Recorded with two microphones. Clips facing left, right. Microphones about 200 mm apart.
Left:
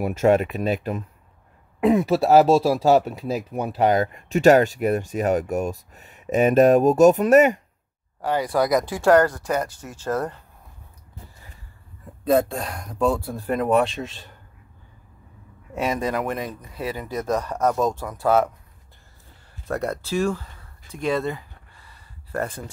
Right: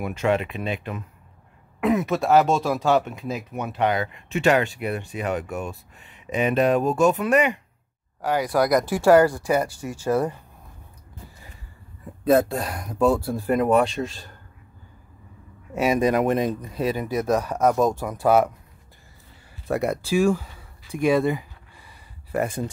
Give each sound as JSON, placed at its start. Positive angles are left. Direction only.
{"t": 0.0, "sound": "speech", "side_deg": 40}
{"t": 8.2, "sound": "speech", "side_deg": -5}
{"t": 12.3, "sound": "speech", "side_deg": -5}
{"t": 15.7, "sound": "speech", "side_deg": -10}
{"t": 19.7, "sound": "a sound", "side_deg": -10}